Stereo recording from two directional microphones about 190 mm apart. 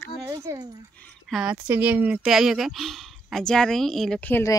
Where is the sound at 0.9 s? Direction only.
5° left (ahead or behind).